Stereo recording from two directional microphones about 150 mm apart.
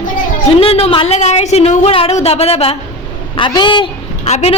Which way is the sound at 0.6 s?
40° left (ahead or behind).